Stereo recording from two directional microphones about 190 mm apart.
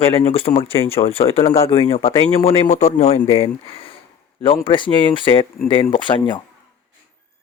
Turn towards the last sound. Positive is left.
turn(degrees=25)  # may be behind; listen again after turning